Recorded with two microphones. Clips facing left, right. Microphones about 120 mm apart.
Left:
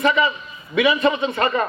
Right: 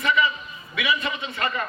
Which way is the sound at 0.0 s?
40° left (ahead or behind).